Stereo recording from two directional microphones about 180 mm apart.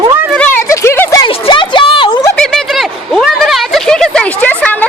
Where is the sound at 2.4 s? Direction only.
Centre (ahead or behind).